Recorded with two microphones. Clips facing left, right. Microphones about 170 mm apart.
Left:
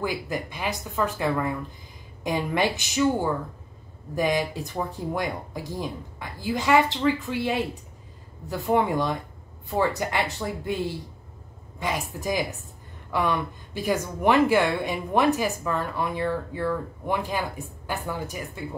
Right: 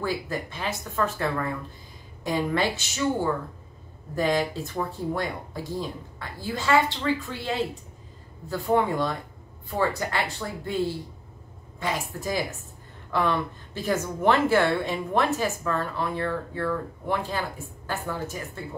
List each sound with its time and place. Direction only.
0.0 s a woman's voice: 15° left (ahead or behind)
4.1 s a woman's voice: 15° left (ahead or behind)
11.8 s a woman's voice: 15° left (ahead or behind)